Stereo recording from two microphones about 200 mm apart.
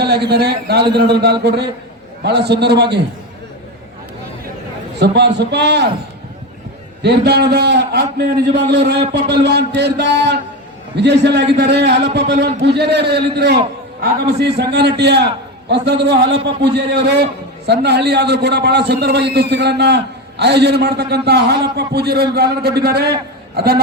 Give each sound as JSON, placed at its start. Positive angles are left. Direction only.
{"t": 0.0, "sound": "a man's voice", "side_deg": -55}
{"t": 4.9, "sound": "a man's voice", "side_deg": -55}
{"t": 7.0, "sound": "a man's voice", "side_deg": -55}